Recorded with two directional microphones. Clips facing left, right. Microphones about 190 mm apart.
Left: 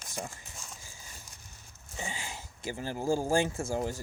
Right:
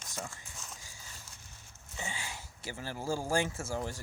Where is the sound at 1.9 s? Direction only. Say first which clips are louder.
Left 2 dB; 15° left (ahead or behind).